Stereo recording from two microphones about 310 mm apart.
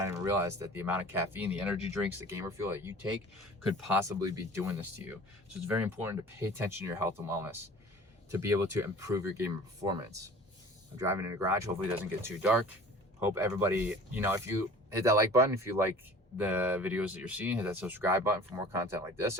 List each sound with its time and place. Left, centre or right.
0.0 s speech: centre
4.3 s speech: centre